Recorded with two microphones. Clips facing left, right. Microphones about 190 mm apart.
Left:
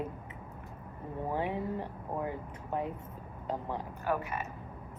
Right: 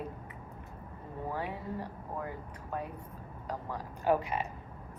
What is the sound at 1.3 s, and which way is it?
Speech, 20° left (ahead or behind).